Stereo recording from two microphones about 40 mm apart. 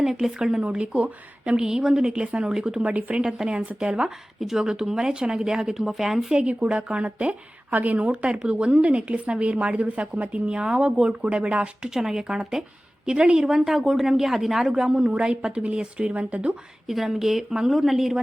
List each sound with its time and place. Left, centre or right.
0.0 s speech: centre
0.6 s a woman's voice: right
1.5 s a woman's voice: centre
2.8 s a woman's voice: right
3.2 s a woman's voice: centre
4.4 s speech: centre
6.3 s a woman's voice: right
11.9 s a woman's voice: centre
13.4 s a woman's voice: centre; by 16.6 s right
16.8 s speech: centre